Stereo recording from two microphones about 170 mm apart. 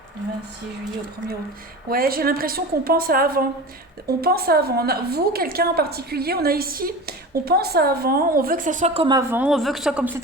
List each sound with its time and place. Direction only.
1.9 s a woman's voice: 60° right (ahead or behind); by 9.1 s 35° right (ahead or behind)
9.3 s a woman's voice: 5° right (ahead or behind)